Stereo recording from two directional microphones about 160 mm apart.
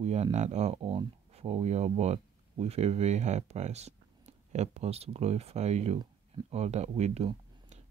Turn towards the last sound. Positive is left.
turn(degrees=-45)  # may be behind; listen again after turning